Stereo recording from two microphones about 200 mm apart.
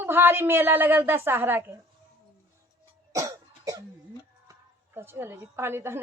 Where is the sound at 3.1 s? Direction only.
15° right (ahead or behind).